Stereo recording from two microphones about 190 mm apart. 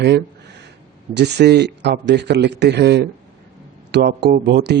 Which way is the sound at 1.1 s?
60° right (ahead or behind).